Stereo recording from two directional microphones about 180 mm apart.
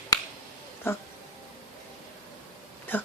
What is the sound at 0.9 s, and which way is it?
Speech, 15° left (ahead or behind).